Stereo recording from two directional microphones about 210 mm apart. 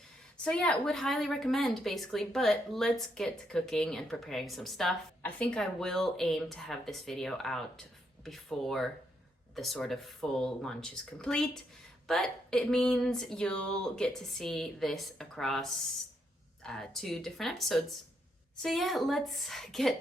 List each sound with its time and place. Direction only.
0.4 s a woman's voice: 5° left (ahead or behind)
16.6 s a woman's voice: centre (ahead or behind)